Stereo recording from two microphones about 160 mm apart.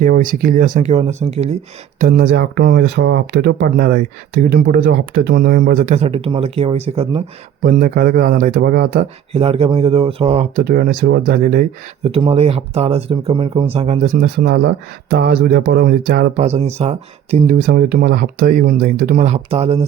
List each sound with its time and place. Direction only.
0.0 s speech: 60° right (ahead or behind)
0.9 s speech: 40° right (ahead or behind)
2.0 s speech: 65° right (ahead or behind); by 7.2 s 40° right (ahead or behind)
7.6 s speech: 60° right (ahead or behind)
9.3 s speech: 35° right (ahead or behind)
10.5 s speech: 70° right (ahead or behind)
12.0 s speech: 40° right (ahead or behind)
14.1 s speech: 80° right
15.1 s speech: 80° right
16.4 s speech: 40° right (ahead or behind); by 19.1 s 65° right (ahead or behind)
19.1 s speech: 45° right (ahead or behind)